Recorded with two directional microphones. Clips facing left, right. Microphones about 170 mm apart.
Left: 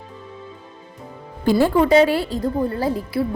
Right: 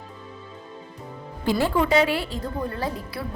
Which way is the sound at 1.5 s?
45° left (ahead or behind).